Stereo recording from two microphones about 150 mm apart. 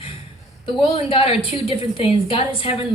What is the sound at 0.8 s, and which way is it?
A woman's voice, 40° left (ahead or behind).